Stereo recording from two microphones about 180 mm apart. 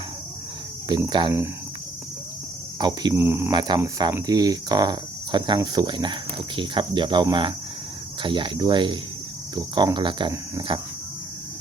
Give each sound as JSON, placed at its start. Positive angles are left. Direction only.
{"t": 0.9, "sound": "speech", "side_deg": -25}
{"t": 2.7, "sound": "speech", "side_deg": -25}
{"t": 3.5, "sound": "speech", "side_deg": -25}